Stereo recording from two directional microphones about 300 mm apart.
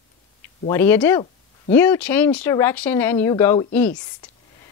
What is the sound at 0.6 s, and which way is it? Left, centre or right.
A woman's voice, centre.